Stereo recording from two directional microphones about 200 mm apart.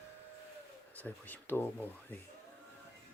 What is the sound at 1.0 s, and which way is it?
Speech, 10° left (ahead or behind).